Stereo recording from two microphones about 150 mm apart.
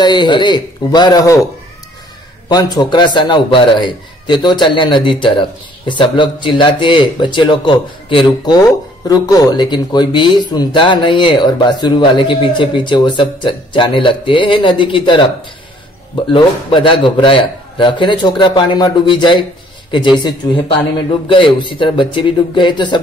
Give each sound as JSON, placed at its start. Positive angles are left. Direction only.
{"t": 0.0, "sound": "speech", "side_deg": 30}
{"t": 2.5, "sound": "speech", "side_deg": 30}
{"t": 16.3, "sound": "speech", "side_deg": 35}